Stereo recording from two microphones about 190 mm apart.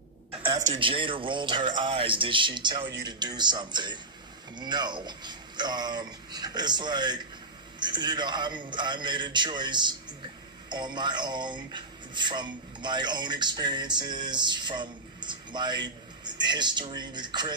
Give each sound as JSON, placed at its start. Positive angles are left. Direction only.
{"t": 0.7, "sound": "speech", "side_deg": -25}